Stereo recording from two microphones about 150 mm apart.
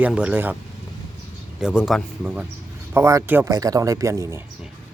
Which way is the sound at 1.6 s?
5° right (ahead or behind).